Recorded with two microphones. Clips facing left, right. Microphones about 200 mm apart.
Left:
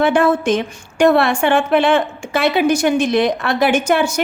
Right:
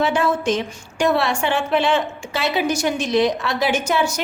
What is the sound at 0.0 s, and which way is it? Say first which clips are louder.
A woman's voice: left 5 dB; 55° left (ahead or behind).